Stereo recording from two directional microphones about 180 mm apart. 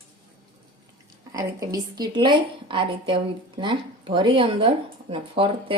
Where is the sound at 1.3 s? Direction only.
20° right (ahead or behind).